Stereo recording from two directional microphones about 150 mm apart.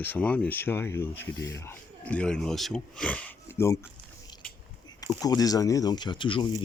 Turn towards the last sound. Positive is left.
turn(degrees=35)  # may be behind; listen again after turning